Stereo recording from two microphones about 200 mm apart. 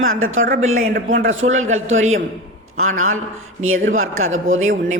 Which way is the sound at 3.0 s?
90° right.